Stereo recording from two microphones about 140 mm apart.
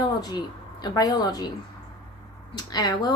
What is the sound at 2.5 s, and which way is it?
Speech, 30° left (ahead or behind).